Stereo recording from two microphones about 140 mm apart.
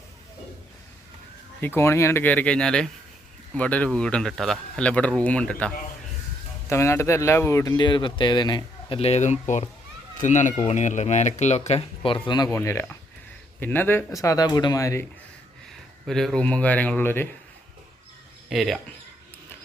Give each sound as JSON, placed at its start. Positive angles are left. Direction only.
{"t": 1.6, "sound": "speech", "side_deg": 15}
{"t": 6.7, "sound": "speech", "side_deg": 20}
{"t": 12.5, "sound": "speech", "side_deg": 20}
{"t": 16.0, "sound": "speech", "side_deg": 5}
{"t": 18.4, "sound": "speech", "side_deg": 0}